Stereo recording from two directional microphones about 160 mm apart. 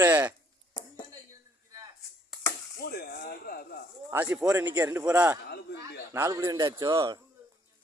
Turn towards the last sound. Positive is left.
turn(degrees=-20)  # may be behind; listen again after turning